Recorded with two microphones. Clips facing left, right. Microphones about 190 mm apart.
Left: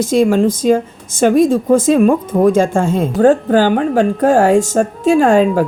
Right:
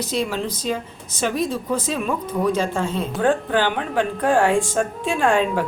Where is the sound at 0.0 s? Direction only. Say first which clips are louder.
Left 12 dB; 45° left (ahead or behind).